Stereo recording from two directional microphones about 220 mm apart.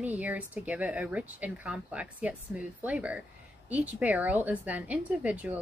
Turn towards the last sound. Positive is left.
turn(degrees=-5)  # may be behind; listen again after turning